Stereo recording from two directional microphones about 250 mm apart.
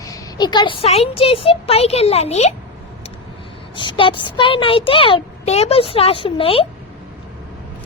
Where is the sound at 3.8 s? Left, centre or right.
Centre.